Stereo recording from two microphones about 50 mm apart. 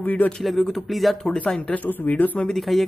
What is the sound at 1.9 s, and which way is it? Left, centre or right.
Speech, left.